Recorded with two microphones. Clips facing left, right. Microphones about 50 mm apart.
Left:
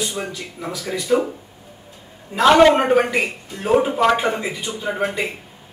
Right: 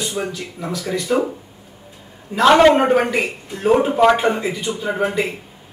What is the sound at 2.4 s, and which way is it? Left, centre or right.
Speech, centre.